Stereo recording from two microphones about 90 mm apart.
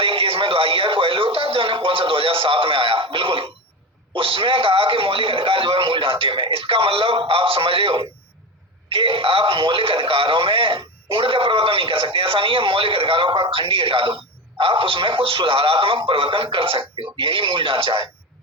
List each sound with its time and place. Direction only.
0.0 s music: 80° right
4.1 s a man's voice: 75° right (ahead or behind)